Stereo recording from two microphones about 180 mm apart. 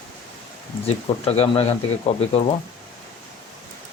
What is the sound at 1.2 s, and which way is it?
Speech, 35° left (ahead or behind).